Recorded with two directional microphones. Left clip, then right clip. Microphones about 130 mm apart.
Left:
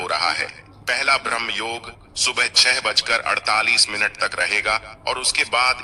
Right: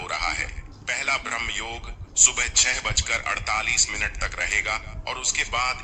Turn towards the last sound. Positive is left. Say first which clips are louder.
# left 6 dB
turn(degrees=40)  # may be behind; listen again after turning